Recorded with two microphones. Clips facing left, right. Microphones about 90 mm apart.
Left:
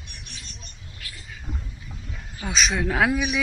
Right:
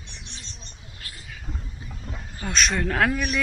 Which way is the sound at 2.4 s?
Centre (ahead or behind).